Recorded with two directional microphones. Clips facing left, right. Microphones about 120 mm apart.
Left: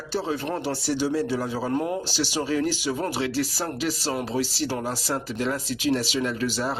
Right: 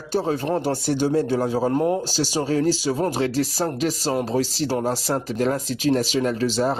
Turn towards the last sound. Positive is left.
turn(degrees=-35)  # may be behind; listen again after turning